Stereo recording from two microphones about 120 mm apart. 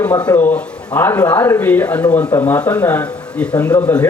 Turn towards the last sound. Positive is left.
turn(degrees=15)  # may be behind; listen again after turning